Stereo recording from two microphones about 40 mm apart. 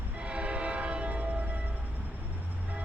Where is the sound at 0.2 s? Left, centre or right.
Right.